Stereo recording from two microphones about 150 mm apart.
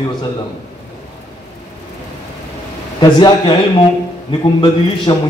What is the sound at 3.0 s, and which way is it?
A man's voice, 30° left (ahead or behind).